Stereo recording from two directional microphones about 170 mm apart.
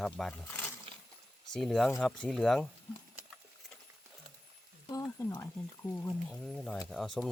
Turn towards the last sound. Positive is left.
turn(degrees=0)  # may be behind; listen again after turning